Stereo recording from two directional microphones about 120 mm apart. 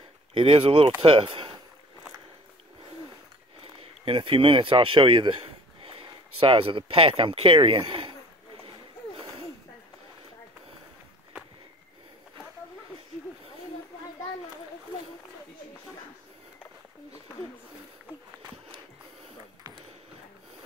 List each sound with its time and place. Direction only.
0.3 s speech: 50° right (ahead or behind)
4.0 s speech: 50° right (ahead or behind)